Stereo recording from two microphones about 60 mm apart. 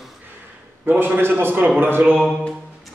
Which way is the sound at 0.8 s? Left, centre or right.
Right.